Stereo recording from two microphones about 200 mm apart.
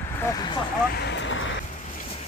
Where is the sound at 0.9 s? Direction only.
60° left (ahead or behind).